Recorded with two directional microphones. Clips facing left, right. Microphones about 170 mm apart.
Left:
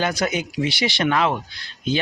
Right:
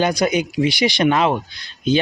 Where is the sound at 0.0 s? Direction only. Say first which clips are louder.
Right 5 dB; 15° right (ahead or behind).